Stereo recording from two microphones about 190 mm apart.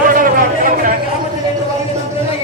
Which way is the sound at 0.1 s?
45° right (ahead or behind).